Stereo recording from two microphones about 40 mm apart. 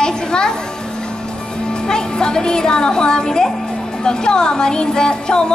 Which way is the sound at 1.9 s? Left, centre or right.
Centre.